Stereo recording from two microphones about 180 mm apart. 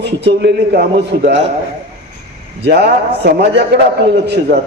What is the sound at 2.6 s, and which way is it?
A man's voice, 65° right (ahead or behind).